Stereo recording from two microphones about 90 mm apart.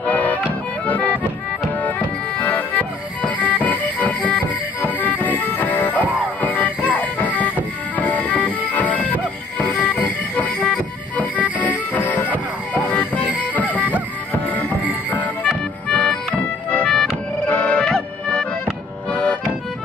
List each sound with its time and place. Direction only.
0.0 s accordion: 15° left (ahead or behind)
2.4 s music: 20° left (ahead or behind)
13.7 s music: 20° right (ahead or behind)
14.4 s music: 20° left (ahead or behind)
15.9 s accordion: 10° left (ahead or behind)
17.5 s music: 15° left (ahead or behind)